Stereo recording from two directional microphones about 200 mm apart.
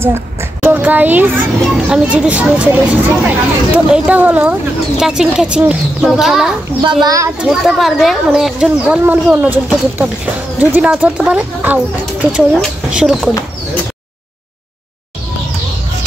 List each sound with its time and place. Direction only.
0.0 s a child's voice: 10° right (ahead or behind)
6.8 s a child's voice: 20° right (ahead or behind)
7.3 s speech: 5° right (ahead or behind)